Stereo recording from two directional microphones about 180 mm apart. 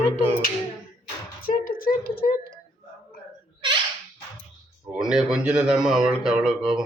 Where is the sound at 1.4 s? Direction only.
50° left (ahead or behind).